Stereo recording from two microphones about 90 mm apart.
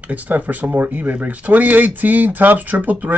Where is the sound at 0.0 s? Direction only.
20° right (ahead or behind).